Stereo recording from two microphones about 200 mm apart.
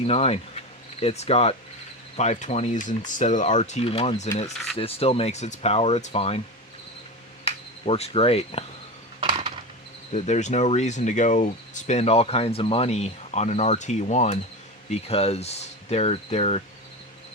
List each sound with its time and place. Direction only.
0.0 s speech: 30° left (ahead or behind)
7.4 s insect: 30° left (ahead or behind)
9.2 s a sound: 25° right (ahead or behind)
10.1 s speech: 35° left (ahead or behind)